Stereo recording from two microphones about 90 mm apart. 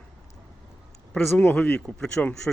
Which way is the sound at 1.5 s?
20° left (ahead or behind).